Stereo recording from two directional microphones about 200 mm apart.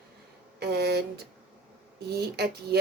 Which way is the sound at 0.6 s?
55° right (ahead or behind).